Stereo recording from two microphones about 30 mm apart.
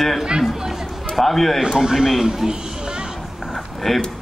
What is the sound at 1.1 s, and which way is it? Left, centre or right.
Speech, centre.